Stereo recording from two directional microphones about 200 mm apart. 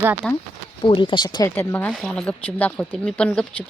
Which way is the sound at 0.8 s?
25° left (ahead or behind).